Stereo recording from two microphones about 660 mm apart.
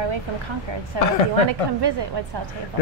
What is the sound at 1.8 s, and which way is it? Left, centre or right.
Speech, right.